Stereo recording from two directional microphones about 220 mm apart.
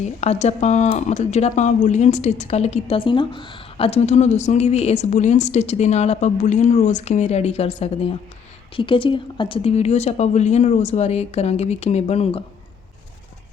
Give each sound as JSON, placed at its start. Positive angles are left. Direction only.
{"t": 0.0, "sound": "a woman's voice", "side_deg": 30}